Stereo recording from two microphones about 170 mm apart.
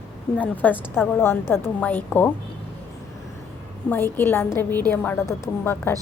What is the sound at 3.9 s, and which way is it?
A woman's voice, 10° left (ahead or behind).